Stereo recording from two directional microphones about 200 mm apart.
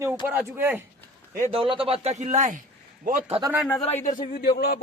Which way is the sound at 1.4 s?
30° right (ahead or behind).